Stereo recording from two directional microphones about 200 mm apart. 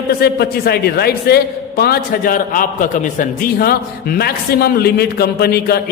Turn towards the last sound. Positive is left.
turn(degrees=50)  # may be behind; listen again after turning